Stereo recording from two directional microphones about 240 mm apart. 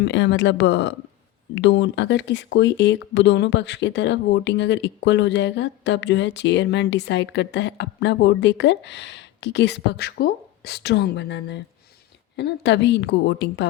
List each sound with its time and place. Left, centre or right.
0.0 s speech: left